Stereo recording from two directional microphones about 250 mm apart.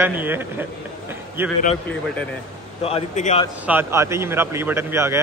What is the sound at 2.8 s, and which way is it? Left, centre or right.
Speech, left.